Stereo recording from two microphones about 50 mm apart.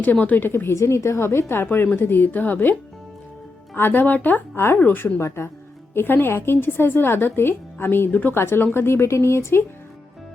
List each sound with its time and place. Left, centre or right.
0.0 s speech: left
0.4 s a woman's voice: left
0.8 s a woman's voice: left
3.8 s a woman's voice: left
5.9 s a woman's voice: left
8.1 s speech: left
8.4 s a woman's voice: left